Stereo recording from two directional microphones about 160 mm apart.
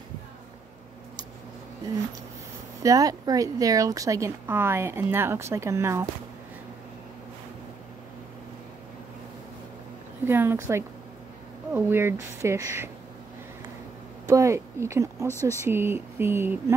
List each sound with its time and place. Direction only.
2.8 s speech: 20° right (ahead or behind)
10.2 s speech: 15° right (ahead or behind)
14.2 s speech: 20° right (ahead or behind)